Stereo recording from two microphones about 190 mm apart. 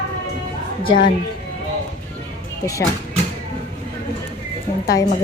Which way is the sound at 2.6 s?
15° left (ahead or behind).